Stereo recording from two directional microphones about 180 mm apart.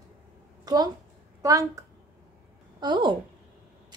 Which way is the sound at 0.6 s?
20° right (ahead or behind).